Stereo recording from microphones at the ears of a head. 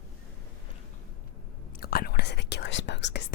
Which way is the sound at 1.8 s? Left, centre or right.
Left.